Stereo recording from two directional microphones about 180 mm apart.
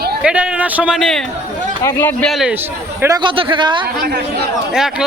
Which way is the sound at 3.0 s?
20° right (ahead or behind).